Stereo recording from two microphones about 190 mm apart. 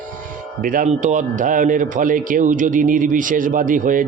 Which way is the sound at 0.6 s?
40° right (ahead or behind).